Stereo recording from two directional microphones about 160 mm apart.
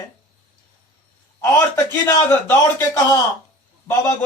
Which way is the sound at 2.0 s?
15° left (ahead or behind).